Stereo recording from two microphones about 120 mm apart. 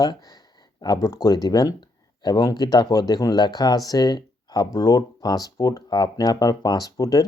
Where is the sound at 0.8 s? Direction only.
30° left (ahead or behind).